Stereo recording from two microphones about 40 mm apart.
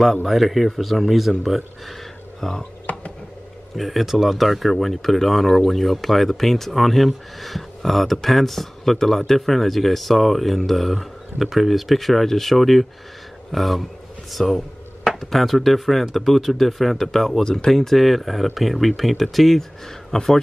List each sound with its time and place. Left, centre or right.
0.2 s speech: centre
2.4 s speech: centre
2.9 s a sound: left
3.7 s speech: centre
17.4 s speech: centre